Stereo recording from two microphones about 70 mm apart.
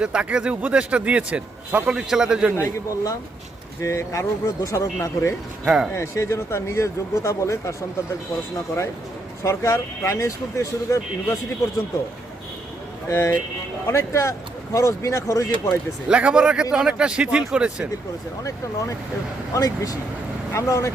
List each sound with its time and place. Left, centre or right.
0.0 s a man's voice: centre
2.6 s speech: left
5.6 s a man's voice: centre
5.9 s speech: left
9.4 s speech: left
13.1 s speech: left
16.0 s a man's voice: centre
19.5 s speech: left